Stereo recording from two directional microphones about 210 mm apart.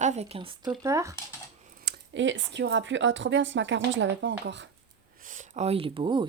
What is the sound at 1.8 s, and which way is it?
Speech, 60° right (ahead or behind).